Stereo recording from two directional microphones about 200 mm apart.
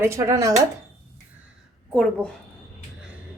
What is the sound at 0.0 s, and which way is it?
Speech, 15° right (ahead or behind).